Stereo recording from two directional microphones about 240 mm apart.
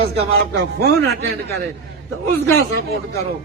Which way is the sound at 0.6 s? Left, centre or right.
Right.